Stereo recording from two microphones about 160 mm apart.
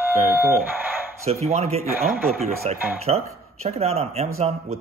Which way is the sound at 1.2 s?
40° right (ahead or behind).